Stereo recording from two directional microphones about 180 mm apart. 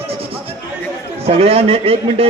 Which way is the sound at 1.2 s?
35° right (ahead or behind).